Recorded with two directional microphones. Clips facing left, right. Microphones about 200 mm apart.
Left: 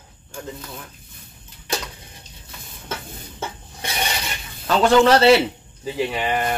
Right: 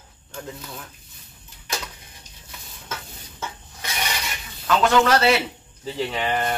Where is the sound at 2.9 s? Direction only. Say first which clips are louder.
Left 4 dB; 30° left (ahead or behind).